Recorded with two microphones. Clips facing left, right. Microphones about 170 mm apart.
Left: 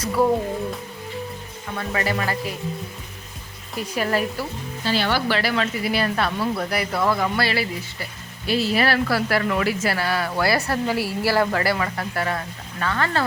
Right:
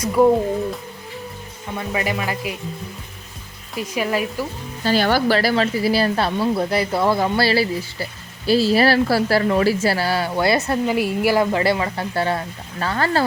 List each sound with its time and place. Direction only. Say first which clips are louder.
1.7 s speech: right 1 dB; 15° right (ahead or behind)
3.8 s speech: right 1 dB; 10° right (ahead or behind)
4.8 s speech: right 5 dB; 45° right (ahead or behind)